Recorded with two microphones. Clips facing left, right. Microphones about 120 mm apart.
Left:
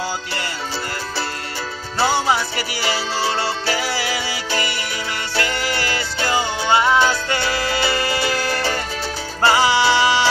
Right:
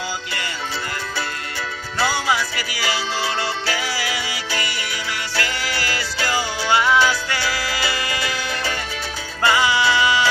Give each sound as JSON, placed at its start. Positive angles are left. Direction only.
{"t": 2.0, "sound": "music", "side_deg": 30}